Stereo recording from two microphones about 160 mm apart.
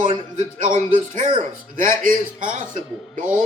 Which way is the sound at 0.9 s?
35° right (ahead or behind).